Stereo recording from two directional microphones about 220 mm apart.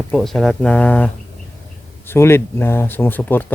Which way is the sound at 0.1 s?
Centre (ahead or behind).